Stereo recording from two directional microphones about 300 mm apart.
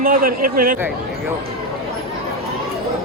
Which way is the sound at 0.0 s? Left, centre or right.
Right.